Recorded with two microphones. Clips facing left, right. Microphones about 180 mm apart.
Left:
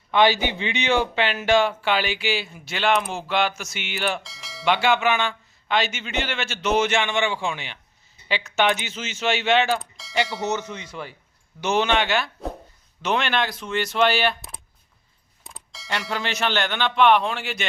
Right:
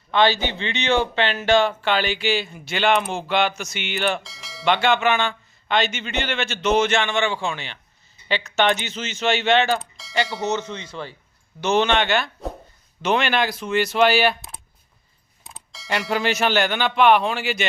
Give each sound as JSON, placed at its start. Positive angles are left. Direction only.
{"t": 0.1, "sound": "speech", "side_deg": 15}
{"t": 10.4, "sound": "speech", "side_deg": -20}
{"t": 10.7, "sound": "speech", "side_deg": 10}